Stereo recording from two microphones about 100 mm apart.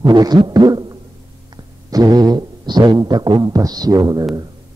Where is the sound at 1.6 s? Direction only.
40° right (ahead or behind).